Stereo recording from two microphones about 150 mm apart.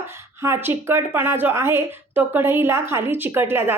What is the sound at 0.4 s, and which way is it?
A woman's voice, 15° right (ahead or behind).